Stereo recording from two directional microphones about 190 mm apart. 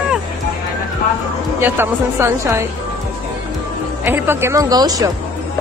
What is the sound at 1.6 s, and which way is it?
Speech, 10° right (ahead or behind).